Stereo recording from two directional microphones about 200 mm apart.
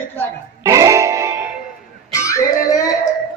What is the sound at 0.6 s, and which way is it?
Music, 15° right (ahead or behind).